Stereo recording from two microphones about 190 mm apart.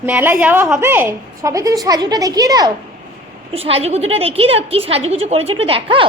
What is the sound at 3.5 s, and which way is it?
A woman's voice, 30° right (ahead or behind).